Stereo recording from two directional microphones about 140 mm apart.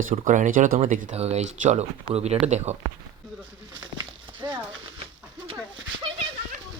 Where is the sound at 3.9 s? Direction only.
35° right (ahead or behind).